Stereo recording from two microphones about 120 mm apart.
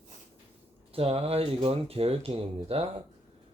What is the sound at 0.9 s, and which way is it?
Speech, 55° right (ahead or behind).